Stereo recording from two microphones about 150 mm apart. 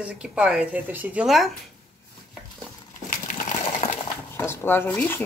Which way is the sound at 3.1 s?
55° left (ahead or behind).